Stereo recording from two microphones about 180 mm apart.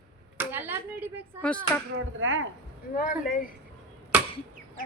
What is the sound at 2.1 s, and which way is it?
Speech, 90° right.